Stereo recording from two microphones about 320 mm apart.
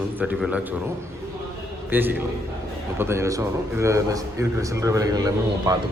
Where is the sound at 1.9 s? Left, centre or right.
Centre.